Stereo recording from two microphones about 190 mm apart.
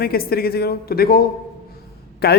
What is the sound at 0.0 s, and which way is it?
Speech, 55° left (ahead or behind).